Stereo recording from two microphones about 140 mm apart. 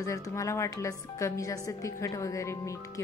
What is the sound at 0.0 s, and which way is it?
A woman's voice, 25° left (ahead or behind).